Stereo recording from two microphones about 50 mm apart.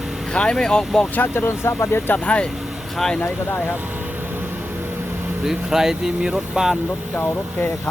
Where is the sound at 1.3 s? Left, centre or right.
Left.